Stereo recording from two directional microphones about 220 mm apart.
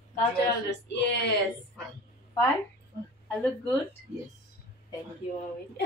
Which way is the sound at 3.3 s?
5° left (ahead or behind).